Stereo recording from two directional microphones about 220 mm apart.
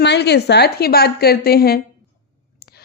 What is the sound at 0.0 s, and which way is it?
Speech, 50° left (ahead or behind).